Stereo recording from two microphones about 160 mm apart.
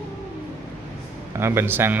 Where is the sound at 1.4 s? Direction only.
15° right (ahead or behind).